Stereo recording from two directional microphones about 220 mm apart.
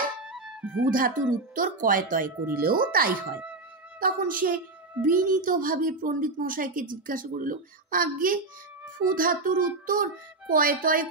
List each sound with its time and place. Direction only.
0.8 s a woman's voice: 40° right (ahead or behind)